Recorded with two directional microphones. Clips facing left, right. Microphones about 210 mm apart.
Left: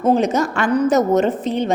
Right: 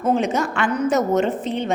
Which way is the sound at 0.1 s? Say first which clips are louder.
Left 3 dB; 40° left (ahead or behind).